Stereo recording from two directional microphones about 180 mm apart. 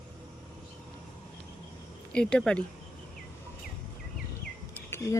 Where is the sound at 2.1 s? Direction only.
5° left (ahead or behind).